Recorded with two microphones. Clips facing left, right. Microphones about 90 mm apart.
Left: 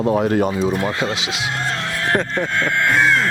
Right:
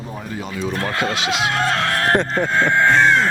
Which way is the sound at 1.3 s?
90° right.